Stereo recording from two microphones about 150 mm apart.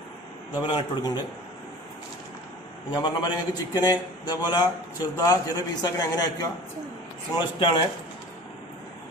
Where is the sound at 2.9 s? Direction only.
30° left (ahead or behind).